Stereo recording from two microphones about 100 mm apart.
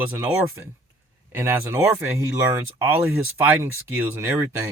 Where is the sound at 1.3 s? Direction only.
25° right (ahead or behind).